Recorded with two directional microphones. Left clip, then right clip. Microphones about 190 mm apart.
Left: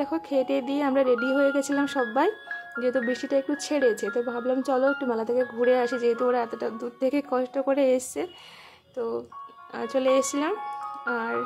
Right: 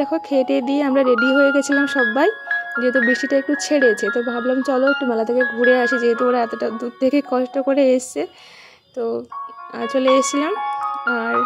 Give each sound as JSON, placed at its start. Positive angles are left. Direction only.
{"t": 0.0, "sound": "speech", "side_deg": -25}
{"t": 10.6, "sound": "music", "side_deg": -40}
{"t": 11.1, "sound": "speech", "side_deg": -25}